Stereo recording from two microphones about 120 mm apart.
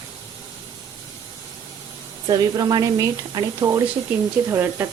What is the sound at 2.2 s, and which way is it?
Speech, 30° right (ahead or behind).